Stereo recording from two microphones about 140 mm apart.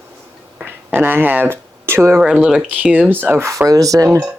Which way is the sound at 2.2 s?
5° right (ahead or behind).